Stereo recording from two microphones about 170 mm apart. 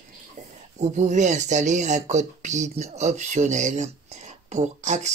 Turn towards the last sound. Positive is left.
turn(degrees=-45)  # may be behind; listen again after turning